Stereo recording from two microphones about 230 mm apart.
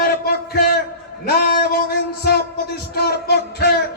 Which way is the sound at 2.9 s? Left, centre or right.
Left.